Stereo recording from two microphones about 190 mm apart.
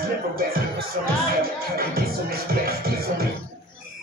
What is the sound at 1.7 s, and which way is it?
Music, 55° right (ahead or behind).